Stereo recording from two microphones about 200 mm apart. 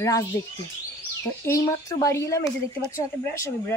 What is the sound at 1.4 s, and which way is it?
Speech, 15° left (ahead or behind).